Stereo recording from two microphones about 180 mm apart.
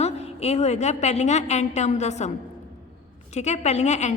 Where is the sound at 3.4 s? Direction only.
40° left (ahead or behind).